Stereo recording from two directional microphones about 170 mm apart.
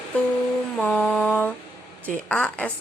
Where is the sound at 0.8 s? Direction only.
5° left (ahead or behind).